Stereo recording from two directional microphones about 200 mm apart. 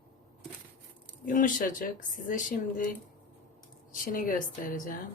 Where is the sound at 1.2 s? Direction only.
40° left (ahead or behind).